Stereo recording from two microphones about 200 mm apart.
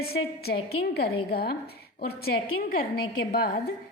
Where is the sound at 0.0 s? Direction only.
50° left (ahead or behind).